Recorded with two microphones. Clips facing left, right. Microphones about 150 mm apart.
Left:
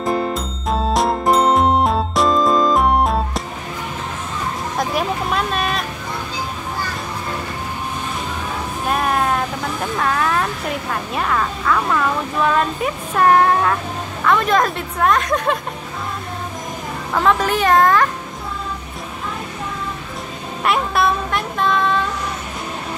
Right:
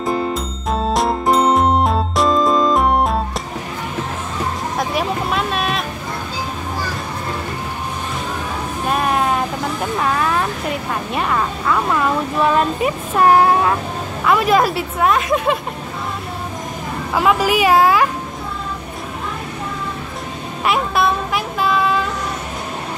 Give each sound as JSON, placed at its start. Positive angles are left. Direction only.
{"t": 0.0, "sound": "music", "side_deg": 0}
{"t": 4.7, "sound": "vehicle", "side_deg": 0}
{"t": 8.8, "sound": "music", "side_deg": 0}
{"t": 9.9, "sound": "speech", "side_deg": -5}
{"t": 17.1, "sound": "speech", "side_deg": -10}
{"t": 20.6, "sound": "a sound", "side_deg": 0}